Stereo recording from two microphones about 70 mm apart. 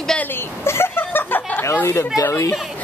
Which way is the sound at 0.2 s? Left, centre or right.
Left.